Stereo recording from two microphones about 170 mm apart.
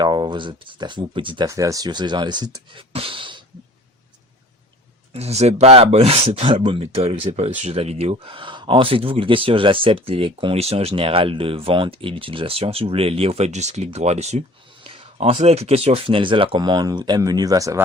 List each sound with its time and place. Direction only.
0.0 s speech: 25° right (ahead or behind)
1.5 s speech: 20° right (ahead or behind)
2.9 s a sound: 30° right (ahead or behind)
5.1 s speech: 40° right (ahead or behind); by 17.8 s 20° right (ahead or behind)